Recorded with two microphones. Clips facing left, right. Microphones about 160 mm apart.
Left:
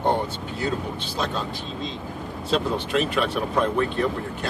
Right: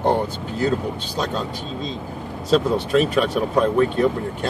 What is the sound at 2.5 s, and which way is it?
Speech, 40° right (ahead or behind).